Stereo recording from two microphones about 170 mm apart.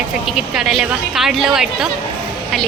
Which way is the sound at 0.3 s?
Centre (ahead or behind).